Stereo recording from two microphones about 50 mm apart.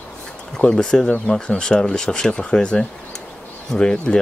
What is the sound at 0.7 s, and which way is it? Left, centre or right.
Speech, centre.